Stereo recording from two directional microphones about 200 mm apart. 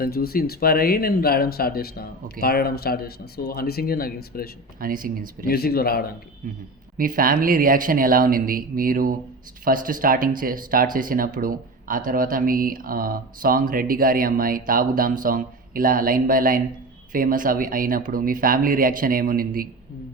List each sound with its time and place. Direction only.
0.0 s speech: 50° left (ahead or behind)
4.8 s speech: 45° right (ahead or behind)
5.5 s speech: 50° left (ahead or behind)
6.4 s speech: 40° right (ahead or behind)